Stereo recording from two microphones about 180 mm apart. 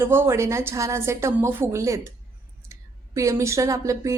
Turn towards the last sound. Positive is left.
turn(degrees=-15)  # may be behind; listen again after turning